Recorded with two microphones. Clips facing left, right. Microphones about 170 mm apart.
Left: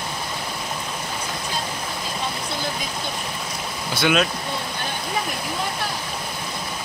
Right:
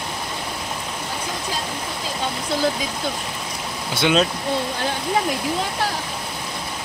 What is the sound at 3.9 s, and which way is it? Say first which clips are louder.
Speech: right 2 dB; 20° right (ahead or behind).